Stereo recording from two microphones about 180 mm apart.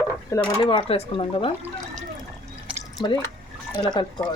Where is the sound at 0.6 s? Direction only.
30° left (ahead or behind).